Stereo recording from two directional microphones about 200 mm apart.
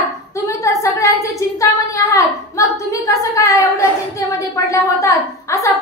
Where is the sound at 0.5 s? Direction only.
15° left (ahead or behind).